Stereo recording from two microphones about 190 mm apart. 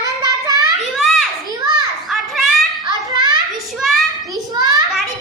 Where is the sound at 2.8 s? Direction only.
20° right (ahead or behind).